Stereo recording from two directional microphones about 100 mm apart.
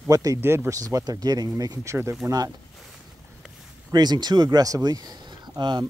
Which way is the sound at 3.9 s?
45° right (ahead or behind).